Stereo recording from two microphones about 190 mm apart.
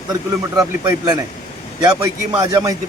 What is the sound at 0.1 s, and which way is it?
A man's voice, 20° right (ahead or behind).